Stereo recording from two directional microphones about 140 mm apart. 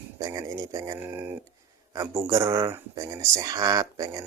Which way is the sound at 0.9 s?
15° right (ahead or behind).